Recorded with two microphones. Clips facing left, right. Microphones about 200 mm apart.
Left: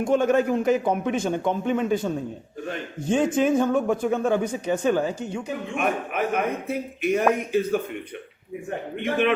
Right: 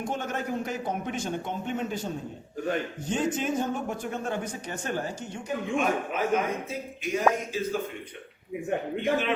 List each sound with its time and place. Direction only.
0.0 s a man's voice: 90° left
1.8 s speech: 55° left (ahead or behind)
9.0 s speech: 60° left (ahead or behind)